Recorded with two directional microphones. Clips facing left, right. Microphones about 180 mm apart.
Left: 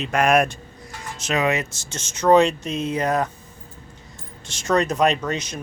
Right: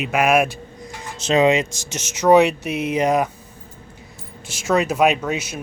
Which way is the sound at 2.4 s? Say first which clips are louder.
Right 2 dB; 65° right (ahead or behind).